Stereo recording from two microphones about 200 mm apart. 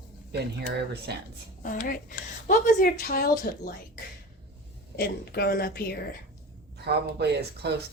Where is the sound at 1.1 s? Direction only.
55° right (ahead or behind).